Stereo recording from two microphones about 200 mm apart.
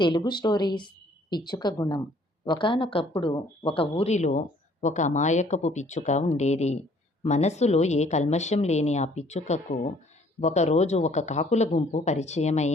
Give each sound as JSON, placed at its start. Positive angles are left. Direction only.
{"t": 0.0, "sound": "speech", "side_deg": 20}